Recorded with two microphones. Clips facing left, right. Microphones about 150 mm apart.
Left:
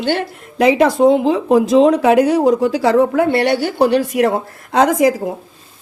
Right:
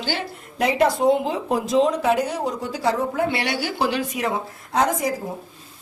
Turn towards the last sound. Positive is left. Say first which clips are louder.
# left 9 dB
turn(degrees=90)